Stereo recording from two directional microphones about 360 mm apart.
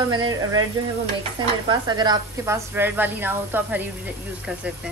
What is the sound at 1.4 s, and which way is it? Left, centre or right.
A woman's voice, centre.